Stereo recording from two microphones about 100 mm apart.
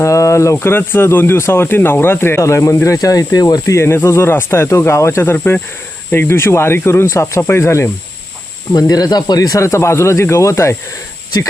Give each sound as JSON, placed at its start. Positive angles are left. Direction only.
{"t": 0.0, "sound": "speech", "side_deg": 30}
{"t": 3.8, "sound": "speech", "side_deg": 25}
{"t": 8.7, "sound": "speech", "side_deg": 40}